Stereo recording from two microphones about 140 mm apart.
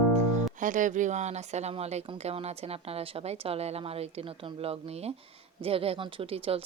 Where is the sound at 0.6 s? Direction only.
65° right (ahead or behind).